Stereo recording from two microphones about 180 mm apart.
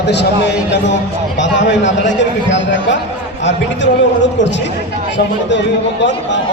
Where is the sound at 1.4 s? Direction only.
85° left.